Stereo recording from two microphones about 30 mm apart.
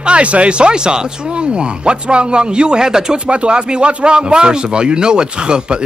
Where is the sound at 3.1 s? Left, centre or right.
Right.